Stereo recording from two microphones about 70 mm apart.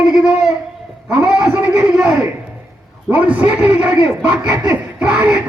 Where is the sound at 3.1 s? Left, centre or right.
Centre.